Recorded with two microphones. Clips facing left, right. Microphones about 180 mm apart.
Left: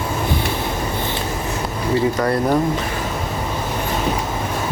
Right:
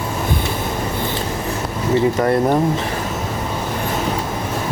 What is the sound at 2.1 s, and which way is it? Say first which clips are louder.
Speech: right 2 dB; 25° right (ahead or behind).